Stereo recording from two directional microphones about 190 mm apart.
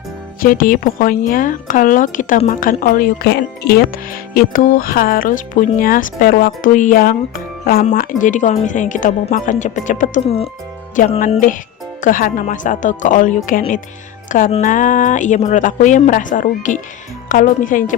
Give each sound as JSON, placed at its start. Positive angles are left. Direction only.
{"t": 0.3, "sound": "speech", "side_deg": 50}
{"t": 7.9, "sound": "speech", "side_deg": 40}
{"t": 11.2, "sound": "speech", "side_deg": 45}
{"t": 14.3, "sound": "music", "side_deg": 45}
{"t": 14.5, "sound": "speech", "side_deg": 40}